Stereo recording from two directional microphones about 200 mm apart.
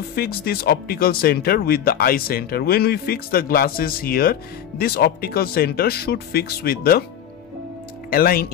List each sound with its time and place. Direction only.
0.1 s speech: 50° left (ahead or behind)
8.1 s speech: 50° left (ahead or behind)